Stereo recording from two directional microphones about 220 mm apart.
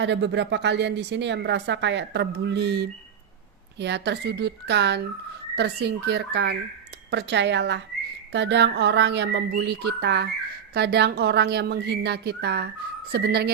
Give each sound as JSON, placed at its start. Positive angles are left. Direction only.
{"t": 0.0, "sound": "speech", "side_deg": -55}